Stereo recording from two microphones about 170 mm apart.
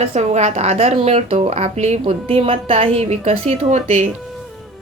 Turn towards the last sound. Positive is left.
turn(degrees=-45)  # may be behind; listen again after turning